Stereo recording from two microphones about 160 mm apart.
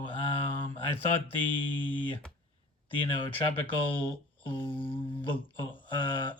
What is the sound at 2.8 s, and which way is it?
Mantra, 35° left (ahead or behind).